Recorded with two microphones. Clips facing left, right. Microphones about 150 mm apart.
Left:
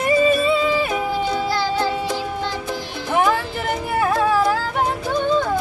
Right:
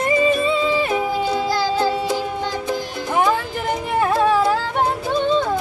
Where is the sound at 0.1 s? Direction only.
20° right (ahead or behind).